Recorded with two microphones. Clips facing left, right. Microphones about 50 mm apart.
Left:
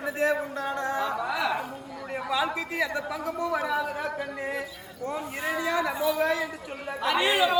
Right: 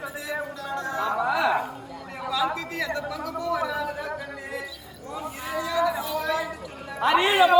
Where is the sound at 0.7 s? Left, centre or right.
Left.